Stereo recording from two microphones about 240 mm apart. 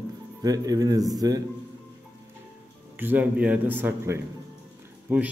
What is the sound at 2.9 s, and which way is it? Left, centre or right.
A man's voice, centre.